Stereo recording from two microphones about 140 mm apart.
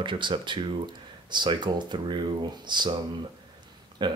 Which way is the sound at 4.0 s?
35° right (ahead or behind).